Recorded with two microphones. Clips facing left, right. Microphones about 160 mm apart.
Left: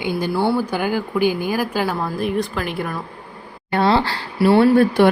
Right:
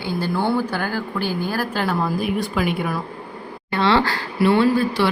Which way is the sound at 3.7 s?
45° left (ahead or behind).